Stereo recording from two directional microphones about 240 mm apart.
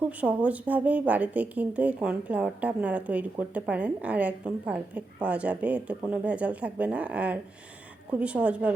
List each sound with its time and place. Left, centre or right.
0.2 s a woman's voice: centre